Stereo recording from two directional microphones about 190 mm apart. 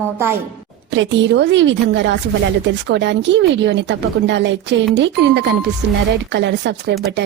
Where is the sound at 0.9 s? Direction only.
75° right (ahead or behind).